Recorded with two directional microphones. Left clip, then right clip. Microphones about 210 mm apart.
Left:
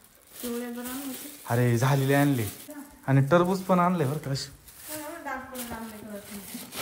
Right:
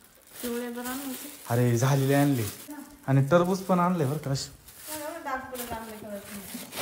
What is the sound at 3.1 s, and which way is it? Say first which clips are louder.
A man's voice: even; 15° right (ahead or behind).